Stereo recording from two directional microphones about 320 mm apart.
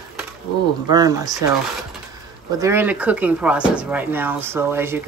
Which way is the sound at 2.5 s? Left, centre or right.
Centre.